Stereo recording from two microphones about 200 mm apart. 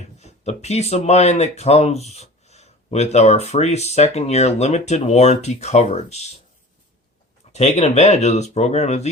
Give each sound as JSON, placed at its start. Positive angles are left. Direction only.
{"t": 0.2, "sound": "speech", "side_deg": 30}
{"t": 7.5, "sound": "speech", "side_deg": 35}